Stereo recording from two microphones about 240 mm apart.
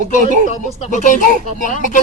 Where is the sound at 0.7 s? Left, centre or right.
Left.